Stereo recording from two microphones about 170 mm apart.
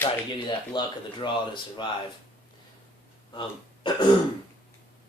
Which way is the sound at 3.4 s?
25° left (ahead or behind).